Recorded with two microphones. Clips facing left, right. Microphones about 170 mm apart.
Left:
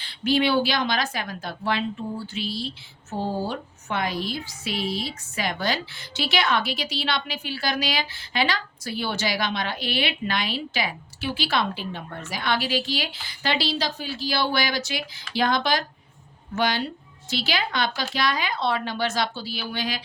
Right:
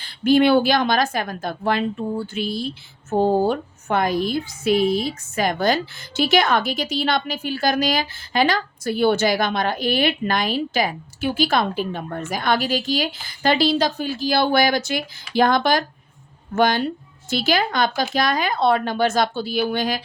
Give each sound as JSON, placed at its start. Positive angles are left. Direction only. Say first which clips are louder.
{"t": 0.0, "sound": "a woman's voice", "louder": "right 7 dB", "side_deg": -50}